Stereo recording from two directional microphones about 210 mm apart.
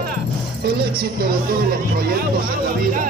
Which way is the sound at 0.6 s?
50° right (ahead or behind).